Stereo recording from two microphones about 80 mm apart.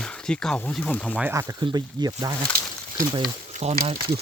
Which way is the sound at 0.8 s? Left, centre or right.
Left.